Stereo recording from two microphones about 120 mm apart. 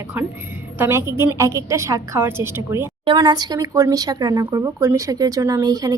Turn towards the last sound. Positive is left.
turn(degrees=-30)  # may be behind; listen again after turning